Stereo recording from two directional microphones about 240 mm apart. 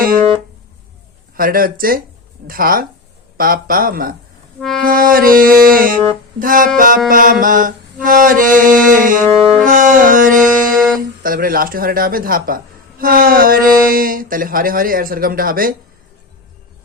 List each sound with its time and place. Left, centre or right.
1.4 s speech: right
9.6 s dog: right
10.8 s a sound: centre
11.2 s speech: right